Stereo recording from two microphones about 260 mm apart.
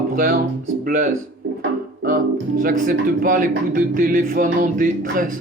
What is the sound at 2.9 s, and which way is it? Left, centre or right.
Music, right.